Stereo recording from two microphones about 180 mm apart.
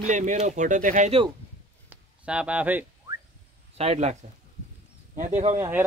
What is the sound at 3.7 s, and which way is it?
Speech, 35° right (ahead or behind).